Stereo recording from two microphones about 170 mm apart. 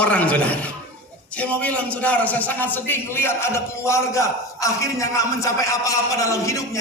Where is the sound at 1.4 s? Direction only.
10° left (ahead or behind).